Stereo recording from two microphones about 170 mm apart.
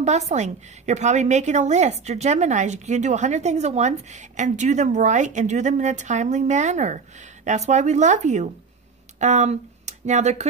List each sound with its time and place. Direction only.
0.0 s a woman's voice: 40° right (ahead or behind)